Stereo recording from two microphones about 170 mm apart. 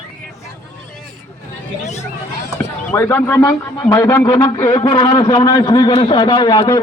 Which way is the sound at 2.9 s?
10° left (ahead or behind).